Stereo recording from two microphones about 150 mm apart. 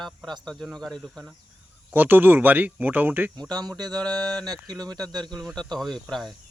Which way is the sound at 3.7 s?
25° right (ahead or behind).